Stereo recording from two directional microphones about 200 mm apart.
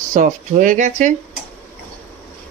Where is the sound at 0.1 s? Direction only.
40° right (ahead or behind).